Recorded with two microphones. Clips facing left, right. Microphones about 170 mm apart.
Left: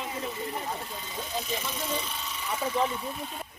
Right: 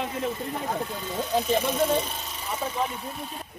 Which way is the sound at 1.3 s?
60° right (ahead or behind).